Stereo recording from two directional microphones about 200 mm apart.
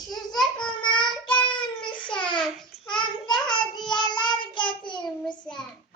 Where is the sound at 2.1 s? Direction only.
25° left (ahead or behind).